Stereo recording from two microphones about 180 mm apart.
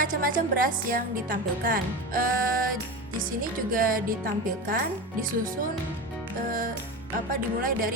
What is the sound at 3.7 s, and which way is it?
A woman's voice, 50° right (ahead or behind).